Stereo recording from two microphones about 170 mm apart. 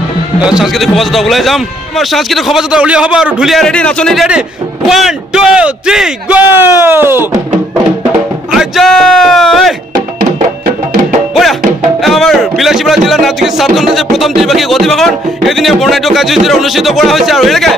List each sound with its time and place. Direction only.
0.4 s a man's voice: 5° right (ahead or behind)
8.5 s speech: centre (ahead or behind)
12.0 s a man's voice: centre (ahead or behind)